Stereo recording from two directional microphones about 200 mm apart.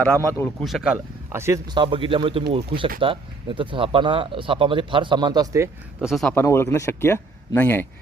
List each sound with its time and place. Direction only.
0.0 s speech: 10° left (ahead or behind)
0.6 s speech: centre (ahead or behind); by 5.6 s 20° right (ahead or behind)
6.0 s speech: centre (ahead or behind)
6.4 s speech: 15° left (ahead or behind)